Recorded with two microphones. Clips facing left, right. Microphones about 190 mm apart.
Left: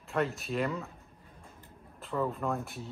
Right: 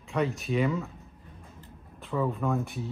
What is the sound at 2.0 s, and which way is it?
Speech, centre (ahead or behind).